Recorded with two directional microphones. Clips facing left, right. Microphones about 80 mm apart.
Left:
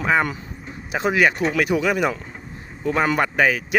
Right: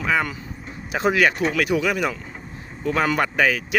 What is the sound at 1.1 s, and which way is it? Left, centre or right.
Speech, centre.